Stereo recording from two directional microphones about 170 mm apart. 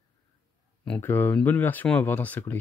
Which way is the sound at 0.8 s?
10° left (ahead or behind).